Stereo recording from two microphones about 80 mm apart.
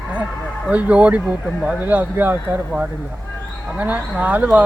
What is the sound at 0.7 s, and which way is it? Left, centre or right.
Speech, centre.